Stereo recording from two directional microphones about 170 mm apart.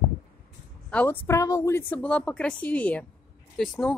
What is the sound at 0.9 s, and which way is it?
Speech, 10° left (ahead or behind).